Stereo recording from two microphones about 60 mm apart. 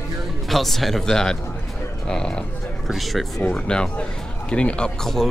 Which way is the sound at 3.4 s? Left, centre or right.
Centre.